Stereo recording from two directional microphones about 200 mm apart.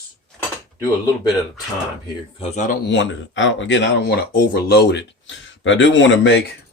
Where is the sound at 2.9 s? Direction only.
70° left (ahead or behind).